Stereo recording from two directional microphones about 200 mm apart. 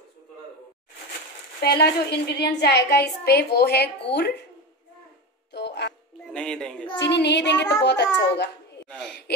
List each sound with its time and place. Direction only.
1.6 s a woman's voice: 55° left (ahead or behind)
5.5 s dog: 55° left (ahead or behind)
6.3 s speech: 5° left (ahead or behind)
7.0 s a woman's voice: 60° left (ahead or behind)